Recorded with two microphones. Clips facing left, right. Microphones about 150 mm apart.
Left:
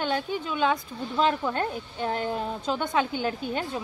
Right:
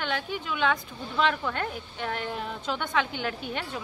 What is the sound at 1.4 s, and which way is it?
A woman's voice, 25° left (ahead or behind).